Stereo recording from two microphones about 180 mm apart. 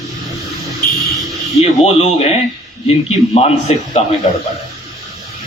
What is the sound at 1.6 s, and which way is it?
Speech, 35° left (ahead or behind).